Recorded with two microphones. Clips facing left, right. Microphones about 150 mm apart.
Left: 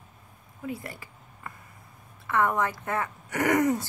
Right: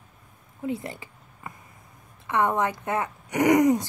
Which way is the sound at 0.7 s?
20° right (ahead or behind).